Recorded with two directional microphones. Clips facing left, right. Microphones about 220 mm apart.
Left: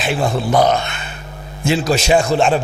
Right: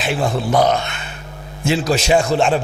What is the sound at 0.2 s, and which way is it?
Speech, 35° left (ahead or behind).